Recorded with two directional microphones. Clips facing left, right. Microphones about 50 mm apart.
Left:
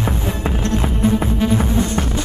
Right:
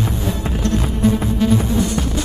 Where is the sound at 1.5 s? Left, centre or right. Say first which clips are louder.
Even; left.